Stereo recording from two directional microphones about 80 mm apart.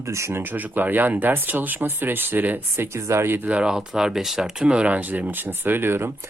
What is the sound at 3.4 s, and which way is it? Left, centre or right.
Speech, centre.